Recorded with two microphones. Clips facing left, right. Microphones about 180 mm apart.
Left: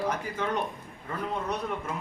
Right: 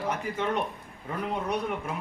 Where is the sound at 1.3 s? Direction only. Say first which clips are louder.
Right 2 dB; 10° right (ahead or behind).